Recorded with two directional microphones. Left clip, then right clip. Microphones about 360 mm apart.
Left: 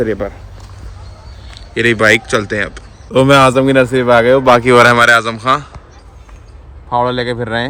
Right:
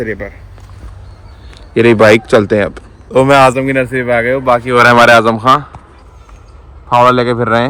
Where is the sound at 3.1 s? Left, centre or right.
Centre.